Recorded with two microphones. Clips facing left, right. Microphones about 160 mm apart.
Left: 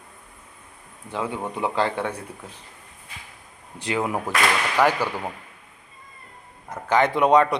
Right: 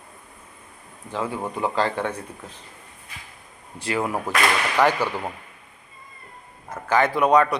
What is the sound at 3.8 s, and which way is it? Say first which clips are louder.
Speech: even; 15° left (ahead or behind).